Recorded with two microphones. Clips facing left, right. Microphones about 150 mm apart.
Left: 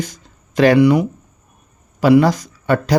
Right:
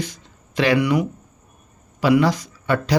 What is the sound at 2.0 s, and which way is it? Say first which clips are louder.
Speech: left 5 dB; 45° left (ahead or behind).